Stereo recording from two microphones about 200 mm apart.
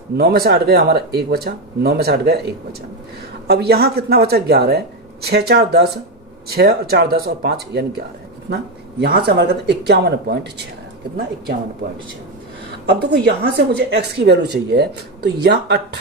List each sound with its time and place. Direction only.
0.2 s speech: 50° right (ahead or behind)
9.0 s a woman's voice: 50° right (ahead or behind)
12.8 s a woman's voice: 55° right (ahead or behind)